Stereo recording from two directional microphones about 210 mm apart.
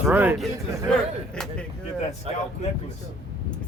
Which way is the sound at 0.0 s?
10° right (ahead or behind).